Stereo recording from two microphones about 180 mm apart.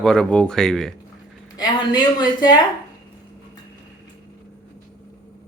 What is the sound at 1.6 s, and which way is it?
A woman's voice, 25° left (ahead or behind).